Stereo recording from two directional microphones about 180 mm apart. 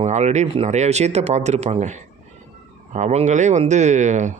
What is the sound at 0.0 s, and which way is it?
Speech, 40° right (ahead or behind).